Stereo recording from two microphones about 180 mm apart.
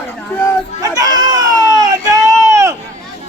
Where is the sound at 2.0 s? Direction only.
20° right (ahead or behind).